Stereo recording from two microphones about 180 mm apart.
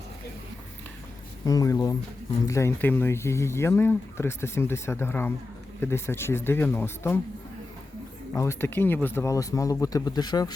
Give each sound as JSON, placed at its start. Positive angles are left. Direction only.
{"t": 1.5, "sound": "speech", "side_deg": 20}
{"t": 8.3, "sound": "speech", "side_deg": 15}